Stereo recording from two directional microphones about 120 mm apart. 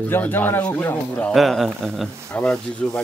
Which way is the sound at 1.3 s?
Centre (ahead or behind).